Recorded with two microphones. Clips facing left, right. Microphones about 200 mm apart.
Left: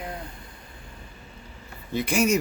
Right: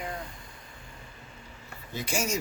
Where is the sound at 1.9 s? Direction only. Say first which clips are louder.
Left 8 dB; 60° left (ahead or behind).